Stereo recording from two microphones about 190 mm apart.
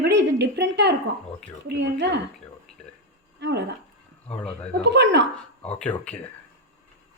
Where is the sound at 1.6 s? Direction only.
65° right (ahead or behind).